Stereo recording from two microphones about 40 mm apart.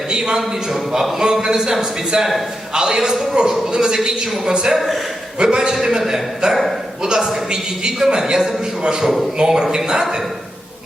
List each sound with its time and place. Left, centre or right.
0.1 s a man's voice: centre
4.7 s a man's voice: centre
5.4 s a man's voice: centre
7.0 s a man's voice: centre
9.4 s a man's voice: right